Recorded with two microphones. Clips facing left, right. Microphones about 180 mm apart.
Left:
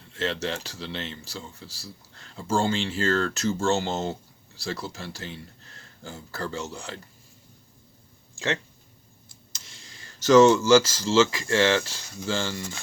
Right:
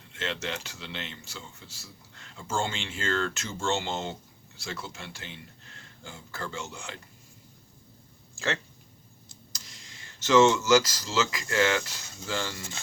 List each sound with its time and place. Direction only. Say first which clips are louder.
0.1 s speech: left 5 dB; 35° left (ahead or behind)
9.5 s speech: left 2 dB; 30° left (ahead or behind)